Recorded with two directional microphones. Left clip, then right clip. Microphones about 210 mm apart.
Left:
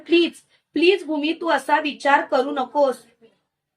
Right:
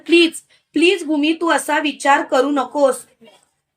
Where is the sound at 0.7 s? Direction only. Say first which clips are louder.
Right 3 dB; 40° right (ahead or behind).